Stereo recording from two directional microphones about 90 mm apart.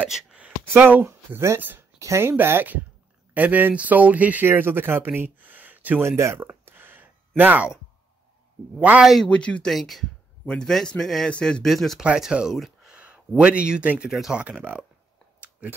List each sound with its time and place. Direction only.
0.1 s a sound: 10° right (ahead or behind)
0.7 s speech: 25° right (ahead or behind)
2.0 s speech: 35° right (ahead or behind)
6.0 s a sound: 30° right (ahead or behind)
9.2 s speech: 10° left (ahead or behind)
12.0 s speech: 10° right (ahead or behind)
14.4 s speech: 15° right (ahead or behind)